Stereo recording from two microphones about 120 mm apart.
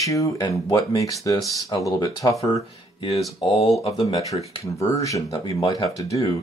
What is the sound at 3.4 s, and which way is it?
Speech, 55° left (ahead or behind).